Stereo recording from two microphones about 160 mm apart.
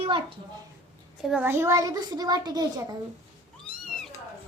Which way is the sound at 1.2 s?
Centre (ahead or behind).